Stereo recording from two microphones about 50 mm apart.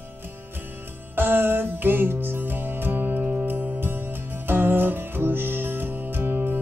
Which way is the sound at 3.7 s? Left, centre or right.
Right.